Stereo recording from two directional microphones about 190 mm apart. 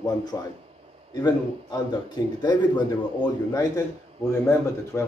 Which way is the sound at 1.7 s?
20° left (ahead or behind).